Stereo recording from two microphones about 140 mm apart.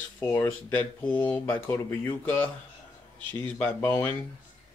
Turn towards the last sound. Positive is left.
turn(degrees=15)  # may be behind; listen again after turning